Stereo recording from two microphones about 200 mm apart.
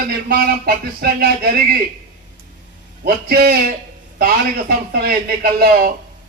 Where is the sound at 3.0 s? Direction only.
50° right (ahead or behind).